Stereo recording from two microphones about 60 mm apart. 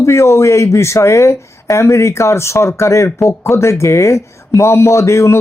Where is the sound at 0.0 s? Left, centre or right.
Left.